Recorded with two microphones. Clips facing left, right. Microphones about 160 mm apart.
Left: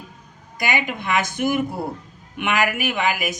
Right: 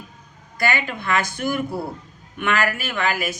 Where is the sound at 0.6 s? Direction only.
15° left (ahead or behind).